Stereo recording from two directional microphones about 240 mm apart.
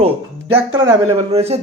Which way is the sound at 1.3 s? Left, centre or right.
Right.